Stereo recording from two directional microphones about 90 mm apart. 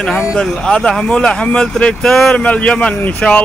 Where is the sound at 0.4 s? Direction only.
10° left (ahead or behind).